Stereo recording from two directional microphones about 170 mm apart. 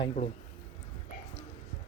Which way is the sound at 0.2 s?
50° left (ahead or behind).